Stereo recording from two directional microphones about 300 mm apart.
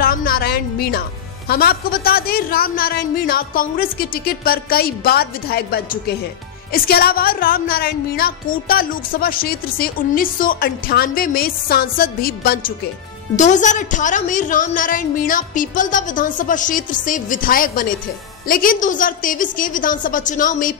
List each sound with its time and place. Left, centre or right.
0.0 s a woman's voice: left